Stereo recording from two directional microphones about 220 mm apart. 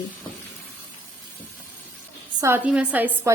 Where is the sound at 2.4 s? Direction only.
10° right (ahead or behind).